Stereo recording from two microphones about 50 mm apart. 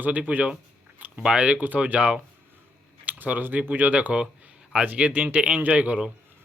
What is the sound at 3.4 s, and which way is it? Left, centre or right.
Speech, right.